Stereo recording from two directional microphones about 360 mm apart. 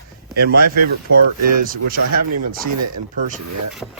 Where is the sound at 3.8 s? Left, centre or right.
Centre.